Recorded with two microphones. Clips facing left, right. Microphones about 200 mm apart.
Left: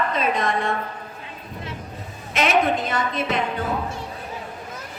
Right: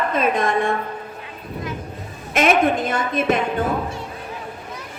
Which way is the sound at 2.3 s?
50° right (ahead or behind).